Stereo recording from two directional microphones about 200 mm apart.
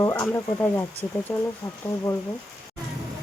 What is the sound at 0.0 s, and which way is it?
Speech, 15° left (ahead or behind).